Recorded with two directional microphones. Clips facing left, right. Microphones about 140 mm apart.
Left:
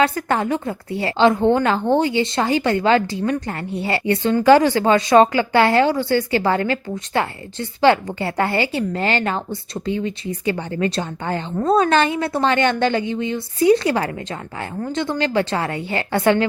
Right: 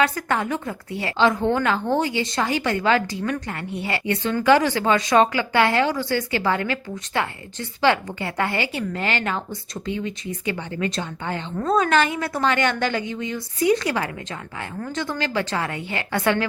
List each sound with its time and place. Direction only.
0.0 s a woman's voice: 30° left (ahead or behind)